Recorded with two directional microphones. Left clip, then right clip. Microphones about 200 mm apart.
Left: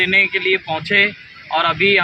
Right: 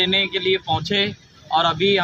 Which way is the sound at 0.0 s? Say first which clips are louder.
Left 5 dB; 10° right (ahead or behind).